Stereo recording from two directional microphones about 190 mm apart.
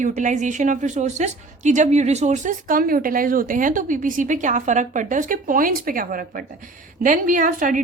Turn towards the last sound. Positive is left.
turn(degrees=-45)  # may be behind; listen again after turning